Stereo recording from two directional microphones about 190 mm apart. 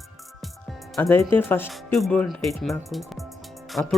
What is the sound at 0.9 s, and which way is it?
Speech, 15° left (ahead or behind).